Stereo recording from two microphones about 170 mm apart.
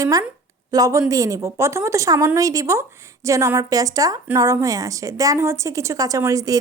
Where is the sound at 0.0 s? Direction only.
20° right (ahead or behind).